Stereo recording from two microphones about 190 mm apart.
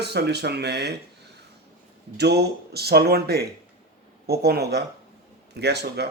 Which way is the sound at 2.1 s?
60° right (ahead or behind).